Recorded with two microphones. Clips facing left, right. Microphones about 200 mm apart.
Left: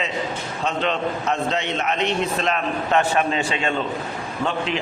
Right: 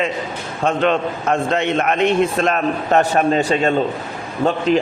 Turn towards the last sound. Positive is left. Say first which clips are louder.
# right 8 dB
turn(degrees=-40)  # may be behind; listen again after turning